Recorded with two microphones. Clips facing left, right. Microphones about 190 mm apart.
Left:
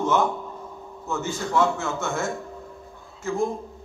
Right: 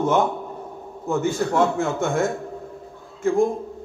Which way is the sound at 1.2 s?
55° right (ahead or behind).